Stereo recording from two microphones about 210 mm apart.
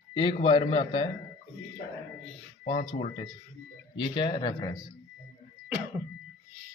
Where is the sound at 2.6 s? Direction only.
25° left (ahead or behind).